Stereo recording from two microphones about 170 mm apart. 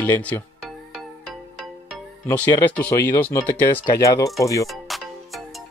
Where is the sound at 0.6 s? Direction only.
5° right (ahead or behind).